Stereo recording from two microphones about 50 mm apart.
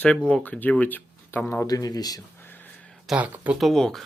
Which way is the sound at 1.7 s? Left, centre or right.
Left.